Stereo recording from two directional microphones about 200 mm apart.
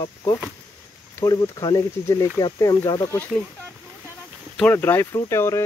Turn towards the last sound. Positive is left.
turn(degrees=15)  # may be behind; listen again after turning